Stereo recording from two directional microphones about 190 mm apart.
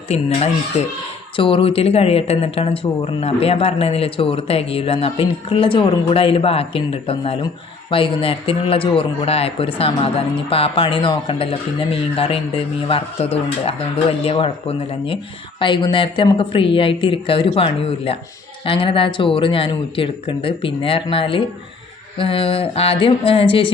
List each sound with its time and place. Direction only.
0.1 s speech: 35° left (ahead or behind)